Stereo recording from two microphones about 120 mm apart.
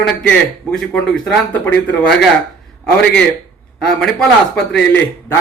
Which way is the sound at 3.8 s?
10° left (ahead or behind).